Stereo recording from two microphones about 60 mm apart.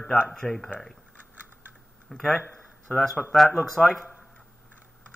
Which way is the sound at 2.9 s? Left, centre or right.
Left.